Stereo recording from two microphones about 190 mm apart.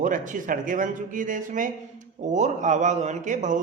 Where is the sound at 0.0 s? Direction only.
40° right (ahead or behind).